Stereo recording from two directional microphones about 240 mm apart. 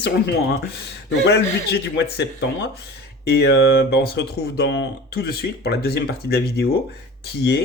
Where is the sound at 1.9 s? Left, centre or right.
Left.